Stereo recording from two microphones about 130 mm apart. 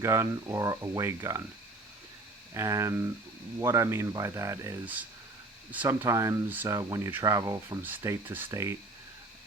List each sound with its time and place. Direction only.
0.0 s speech: 20° right (ahead or behind)
2.5 s speech: 25° right (ahead or behind)
7.8 s speech: 15° right (ahead or behind)